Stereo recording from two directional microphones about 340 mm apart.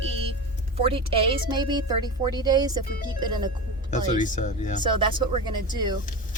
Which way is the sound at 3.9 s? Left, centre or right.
Left.